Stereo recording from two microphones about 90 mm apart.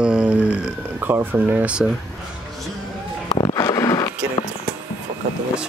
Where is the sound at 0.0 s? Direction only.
10° right (ahead or behind).